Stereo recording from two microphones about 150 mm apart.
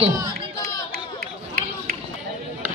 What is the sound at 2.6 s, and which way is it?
Chop, 10° right (ahead or behind).